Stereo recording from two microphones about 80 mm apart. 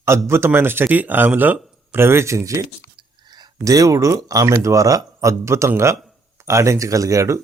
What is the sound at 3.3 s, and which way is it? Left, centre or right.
Speech, right.